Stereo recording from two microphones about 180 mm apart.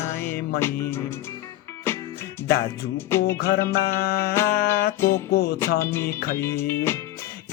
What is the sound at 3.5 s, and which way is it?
Music, 60° left (ahead or behind).